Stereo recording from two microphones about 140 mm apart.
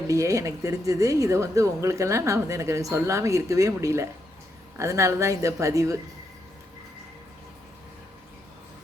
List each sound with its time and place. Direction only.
0.1 s a woman's voice: 20° right (ahead or behind)